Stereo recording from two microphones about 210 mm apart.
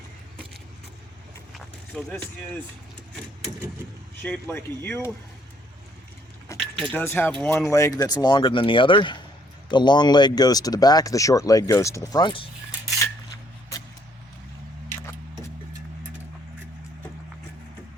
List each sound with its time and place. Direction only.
1.5 s speech: centre (ahead or behind)
4.2 s speech: 5° left (ahead or behind)
6.6 s speech: centre (ahead or behind); by 12.5 s 25° left (ahead or behind)